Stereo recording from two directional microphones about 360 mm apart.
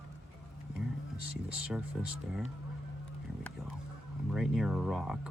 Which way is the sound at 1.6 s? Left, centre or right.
Centre.